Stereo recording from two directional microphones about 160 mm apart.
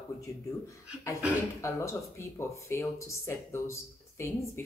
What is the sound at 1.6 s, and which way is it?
Speech, 15° left (ahead or behind).